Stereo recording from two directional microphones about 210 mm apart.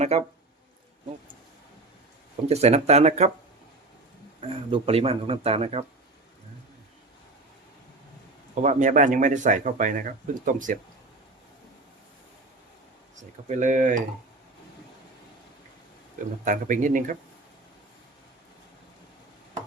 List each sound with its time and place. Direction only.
0.1 s speech: 30° right (ahead or behind)
2.5 s speech: 30° right (ahead or behind)
4.4 s speech: 25° right (ahead or behind)
8.6 s speech: 35° right (ahead or behind)
13.5 s speech: 35° right (ahead or behind)
16.4 s speech: 40° right (ahead or behind)